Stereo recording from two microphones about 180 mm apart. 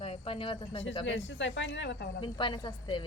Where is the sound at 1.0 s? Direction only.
90° left.